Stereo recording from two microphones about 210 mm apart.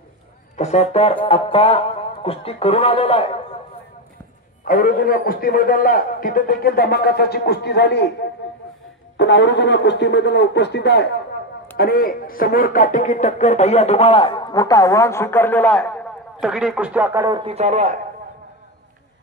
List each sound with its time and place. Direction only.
0.6 s speech: 30° left (ahead or behind)
4.6 s a man's voice: 40° left (ahead or behind); by 17.4 s 15° right (ahead or behind)
17.4 s a man's voice: 30° right (ahead or behind)